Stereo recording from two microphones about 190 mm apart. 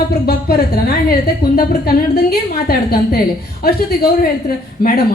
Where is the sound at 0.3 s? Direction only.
55° left (ahead or behind).